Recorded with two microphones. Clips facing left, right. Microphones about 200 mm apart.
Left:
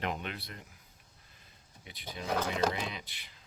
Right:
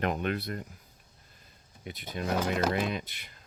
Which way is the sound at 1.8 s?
50° right (ahead or behind).